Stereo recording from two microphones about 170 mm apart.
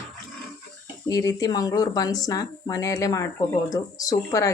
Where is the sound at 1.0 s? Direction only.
20° left (ahead or behind).